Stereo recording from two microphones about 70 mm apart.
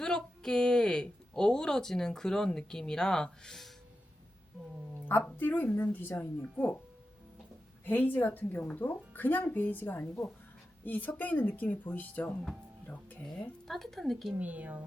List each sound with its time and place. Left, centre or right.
0.0 s a woman's voice: centre
5.4 s speech: left
7.9 s speech: left
13.2 s speech: centre
14.3 s speech: right